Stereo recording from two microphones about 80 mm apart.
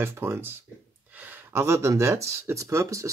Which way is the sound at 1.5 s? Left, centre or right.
Right.